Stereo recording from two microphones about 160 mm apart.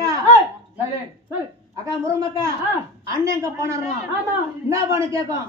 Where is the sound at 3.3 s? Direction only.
20° right (ahead or behind).